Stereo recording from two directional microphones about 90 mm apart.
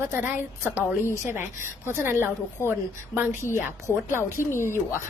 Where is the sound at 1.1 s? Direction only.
25° right (ahead or behind).